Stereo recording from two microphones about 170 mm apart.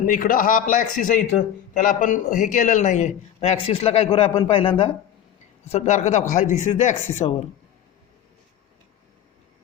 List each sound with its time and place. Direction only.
0.0 s a man's voice: 55° left (ahead or behind); by 4.7 s 30° left (ahead or behind)
5.7 s speech: 40° left (ahead or behind)